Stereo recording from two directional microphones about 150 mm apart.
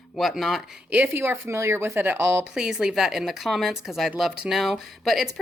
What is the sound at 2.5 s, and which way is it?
Speech, 5° right (ahead or behind).